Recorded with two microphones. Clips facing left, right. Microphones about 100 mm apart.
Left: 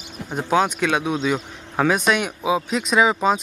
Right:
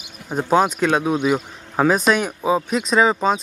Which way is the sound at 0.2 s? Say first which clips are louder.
Right 1 dB; 50° left (ahead or behind).